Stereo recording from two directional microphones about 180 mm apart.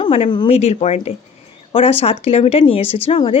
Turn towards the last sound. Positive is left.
turn(degrees=30)  # may be behind; listen again after turning